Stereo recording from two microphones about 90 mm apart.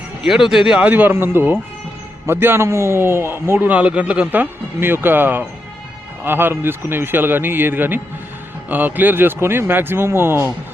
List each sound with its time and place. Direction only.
0.2 s a man's voice: 5° right (ahead or behind); by 3.7 s 30° right (ahead or behind)
3.7 s a man's voice: 15° right (ahead or behind)